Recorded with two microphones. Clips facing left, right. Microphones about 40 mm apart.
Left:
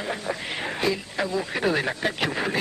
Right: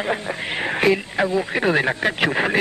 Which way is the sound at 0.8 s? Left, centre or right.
Right.